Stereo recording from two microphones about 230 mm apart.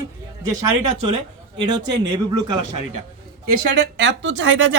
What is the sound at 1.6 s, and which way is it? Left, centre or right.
Speech, centre.